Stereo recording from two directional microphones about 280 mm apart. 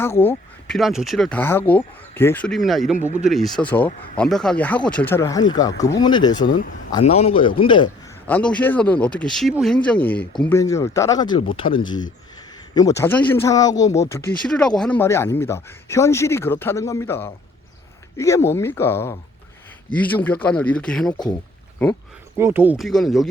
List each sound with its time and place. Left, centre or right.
0.0 s speech: centre
3.0 s speech: right
3.5 s a man's voice: centre
8.3 s speech: centre
20.2 s speech: centre
22.4 s speech: centre